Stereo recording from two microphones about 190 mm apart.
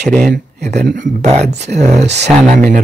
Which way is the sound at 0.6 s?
40° right (ahead or behind).